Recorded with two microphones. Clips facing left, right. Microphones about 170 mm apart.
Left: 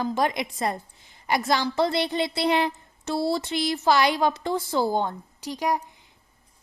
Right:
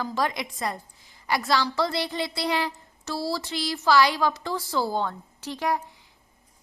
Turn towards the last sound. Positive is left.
turn(degrees=15)  # may be behind; listen again after turning